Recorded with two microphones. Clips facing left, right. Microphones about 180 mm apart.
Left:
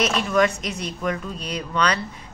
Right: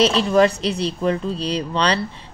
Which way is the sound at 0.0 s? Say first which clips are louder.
Right 5 dB; 30° right (ahead or behind).